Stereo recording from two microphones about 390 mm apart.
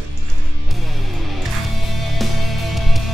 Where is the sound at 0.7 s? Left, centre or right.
Centre.